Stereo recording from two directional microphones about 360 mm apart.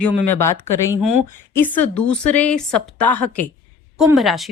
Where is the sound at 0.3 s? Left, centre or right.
Centre.